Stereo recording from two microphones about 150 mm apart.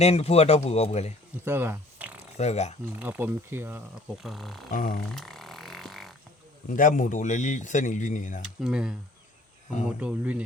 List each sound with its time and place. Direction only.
0.0 s speech: 45° left (ahead or behind)
1.5 s speech: 15° right (ahead or behind)
2.4 s speech: 50° left (ahead or behind)
3.0 s speech: 10° right (ahead or behind)
4.2 s speech: centre (ahead or behind)
4.7 s speech: 65° left (ahead or behind)
5.1 s vehicle: centre (ahead or behind)
6.7 s speech: 60° left (ahead or behind)
8.6 s speech: 5° right (ahead or behind)